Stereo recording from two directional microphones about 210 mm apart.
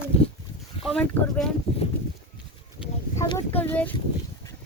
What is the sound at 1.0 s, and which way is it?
Speech, 5° left (ahead or behind).